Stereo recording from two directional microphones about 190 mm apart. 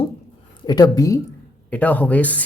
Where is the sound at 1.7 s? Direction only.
10° left (ahead or behind).